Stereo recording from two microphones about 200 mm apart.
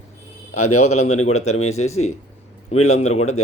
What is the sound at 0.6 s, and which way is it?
Speech, 90° left.